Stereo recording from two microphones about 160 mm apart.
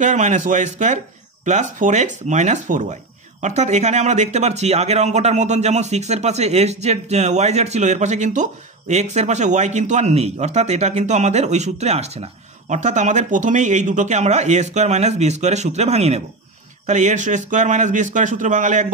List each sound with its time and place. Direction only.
0.0 s speech: 50° right (ahead or behind)